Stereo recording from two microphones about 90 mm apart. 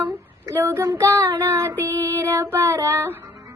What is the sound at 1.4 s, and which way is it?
Female singing, 35° right (ahead or behind).